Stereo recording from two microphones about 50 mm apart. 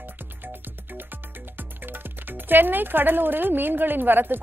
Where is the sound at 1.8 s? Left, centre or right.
Right.